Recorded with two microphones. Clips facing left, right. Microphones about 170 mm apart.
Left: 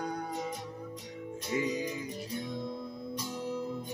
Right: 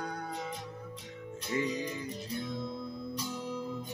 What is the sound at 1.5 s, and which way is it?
Music, 10° left (ahead or behind).